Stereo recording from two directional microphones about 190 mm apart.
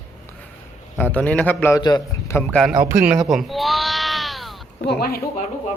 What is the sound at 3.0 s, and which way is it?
Bleat, centre (ahead or behind).